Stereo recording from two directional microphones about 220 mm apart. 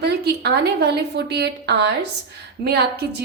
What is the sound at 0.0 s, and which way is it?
A woman's voice, 50° right (ahead or behind).